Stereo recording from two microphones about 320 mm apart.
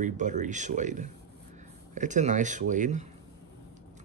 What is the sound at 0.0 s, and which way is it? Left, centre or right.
Speech, right.